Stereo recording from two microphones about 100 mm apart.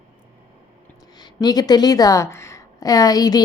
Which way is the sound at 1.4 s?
40° left (ahead or behind).